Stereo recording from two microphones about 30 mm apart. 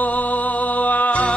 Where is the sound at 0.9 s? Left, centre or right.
Left.